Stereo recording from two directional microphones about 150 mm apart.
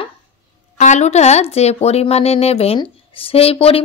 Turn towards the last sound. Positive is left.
turn(degrees=40)  # may be behind; listen again after turning